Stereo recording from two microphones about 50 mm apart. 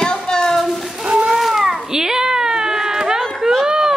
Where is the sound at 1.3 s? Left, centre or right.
Centre.